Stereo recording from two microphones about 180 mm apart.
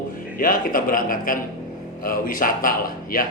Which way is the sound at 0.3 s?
50° left (ahead or behind).